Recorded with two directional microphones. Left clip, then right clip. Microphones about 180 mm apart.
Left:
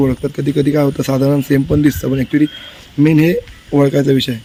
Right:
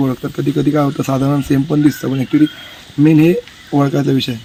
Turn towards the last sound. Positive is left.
turn(degrees=30)  # may be behind; listen again after turning